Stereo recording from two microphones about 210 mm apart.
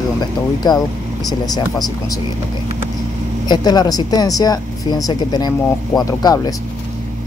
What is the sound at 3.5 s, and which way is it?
Speech, 20° left (ahead or behind).